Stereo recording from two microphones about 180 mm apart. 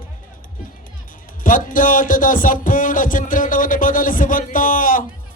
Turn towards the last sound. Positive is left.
turn(degrees=45)  # may be behind; listen again after turning